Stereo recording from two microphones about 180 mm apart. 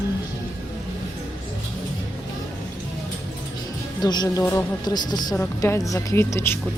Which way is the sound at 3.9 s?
20° left (ahead or behind).